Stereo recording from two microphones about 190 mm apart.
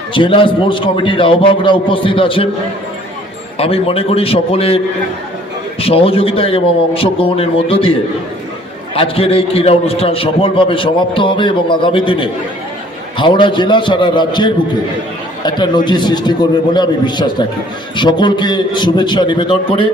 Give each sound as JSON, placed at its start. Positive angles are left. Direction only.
{"t": 0.1, "sound": "a man's voice", "side_deg": 25}
{"t": 3.6, "sound": "a man's voice", "side_deg": 30}
{"t": 5.8, "sound": "a man's voice", "side_deg": 30}
{"t": 9.0, "sound": "a man's voice", "side_deg": 30}